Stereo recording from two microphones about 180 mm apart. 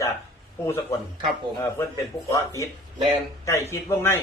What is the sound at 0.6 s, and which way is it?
Speech, 15° left (ahead or behind).